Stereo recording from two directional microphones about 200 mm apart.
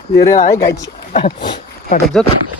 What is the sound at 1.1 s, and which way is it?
Speech, 25° left (ahead or behind).